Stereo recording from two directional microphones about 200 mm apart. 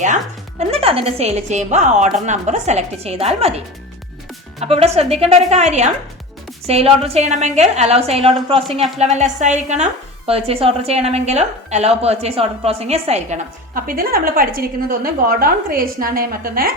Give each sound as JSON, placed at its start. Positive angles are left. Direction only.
{"t": 0.6, "sound": "speech", "side_deg": -30}
{"t": 4.6, "sound": "a woman's voice", "side_deg": -30}